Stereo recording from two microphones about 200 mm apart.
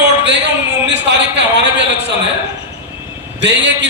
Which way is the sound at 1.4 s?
60° right (ahead or behind).